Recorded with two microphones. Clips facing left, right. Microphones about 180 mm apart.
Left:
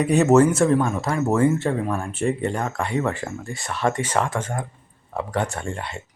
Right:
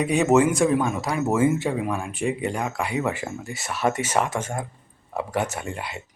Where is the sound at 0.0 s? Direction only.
10° right (ahead or behind).